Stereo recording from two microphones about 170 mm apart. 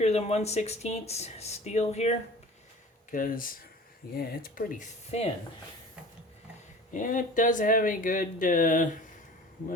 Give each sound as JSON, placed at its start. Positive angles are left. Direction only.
{"t": 0.0, "sound": "speech", "side_deg": 40}
{"t": 3.1, "sound": "speech", "side_deg": 55}
{"t": 5.1, "sound": "speech", "side_deg": 40}
{"t": 6.9, "sound": "speech", "side_deg": 50}